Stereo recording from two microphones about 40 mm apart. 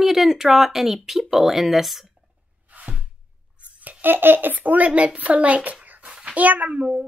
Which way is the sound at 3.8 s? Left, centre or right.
Right.